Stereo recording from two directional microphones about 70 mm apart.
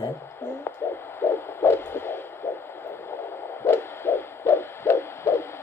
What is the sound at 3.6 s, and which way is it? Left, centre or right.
Hoot, left.